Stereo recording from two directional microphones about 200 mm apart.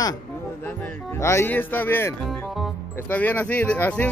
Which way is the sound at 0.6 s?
10° left (ahead or behind).